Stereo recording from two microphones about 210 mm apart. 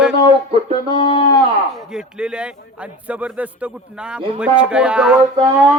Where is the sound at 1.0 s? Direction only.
20° left (ahead or behind).